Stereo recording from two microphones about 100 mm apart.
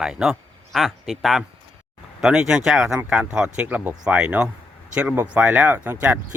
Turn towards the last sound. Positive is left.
turn(degrees=-20)  # may be behind; listen again after turning